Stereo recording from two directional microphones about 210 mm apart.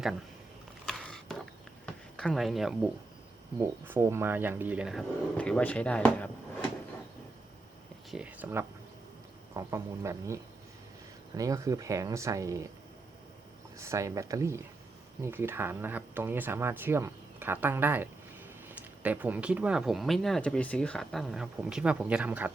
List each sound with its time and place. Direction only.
0.9 s a sound: centre (ahead or behind)
2.1 s speech: centre (ahead or behind)
3.6 s speech: 10° right (ahead or behind); by 6.7 s 5° left (ahead or behind)
8.1 s speech: 5° right (ahead or behind)
13.7 s speech: 15° right (ahead or behind)